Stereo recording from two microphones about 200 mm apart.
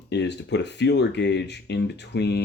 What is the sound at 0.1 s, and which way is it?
Speech, 60° left (ahead or behind).